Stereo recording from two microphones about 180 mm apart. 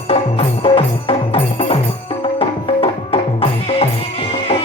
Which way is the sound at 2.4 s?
30° left (ahead or behind).